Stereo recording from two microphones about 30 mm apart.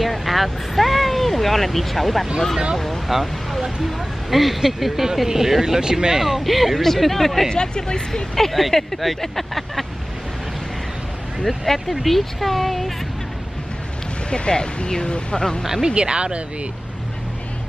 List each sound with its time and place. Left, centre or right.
0.0 s speech: centre; by 6.2 s right
6.2 s speech: centre
7.5 s speech: left
8.4 s speech: centre
11.4 s speech: centre
14.3 s speech: left
15.0 s speech: left
15.6 s speech: centre
15.9 s speech: right